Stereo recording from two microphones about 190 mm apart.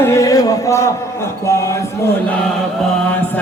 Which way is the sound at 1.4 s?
15° left (ahead or behind).